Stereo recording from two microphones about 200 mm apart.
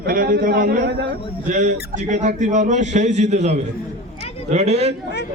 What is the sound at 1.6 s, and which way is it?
Speech, 40° right (ahead or behind).